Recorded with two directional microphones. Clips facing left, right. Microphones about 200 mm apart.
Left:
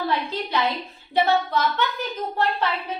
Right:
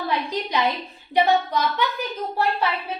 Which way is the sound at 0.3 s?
15° right (ahead or behind).